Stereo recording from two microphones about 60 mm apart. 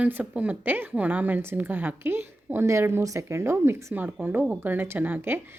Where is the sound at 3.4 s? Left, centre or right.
Right.